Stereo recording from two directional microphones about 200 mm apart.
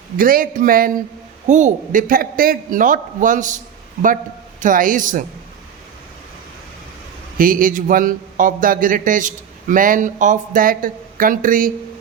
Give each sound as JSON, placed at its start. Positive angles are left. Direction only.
{"t": 0.2, "sound": "a man's voice", "side_deg": -45}
{"t": 4.6, "sound": "a man's voice", "side_deg": -40}
{"t": 7.3, "sound": "a man's voice", "side_deg": -45}